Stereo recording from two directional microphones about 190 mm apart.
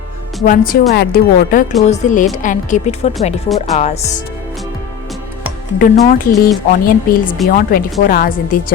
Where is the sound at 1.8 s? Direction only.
40° left (ahead or behind).